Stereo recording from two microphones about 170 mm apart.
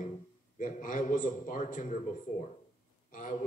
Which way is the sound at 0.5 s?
50° left (ahead or behind).